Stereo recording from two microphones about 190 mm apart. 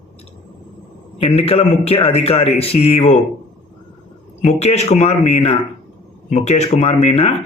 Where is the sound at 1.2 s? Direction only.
30° left (ahead or behind).